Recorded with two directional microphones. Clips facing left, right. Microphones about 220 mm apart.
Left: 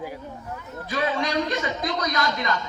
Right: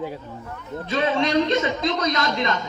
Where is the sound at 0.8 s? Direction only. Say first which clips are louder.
Right 4 dB; 25° right (ahead or behind).